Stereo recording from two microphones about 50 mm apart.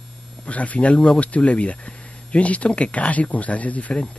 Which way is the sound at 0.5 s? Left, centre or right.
Left.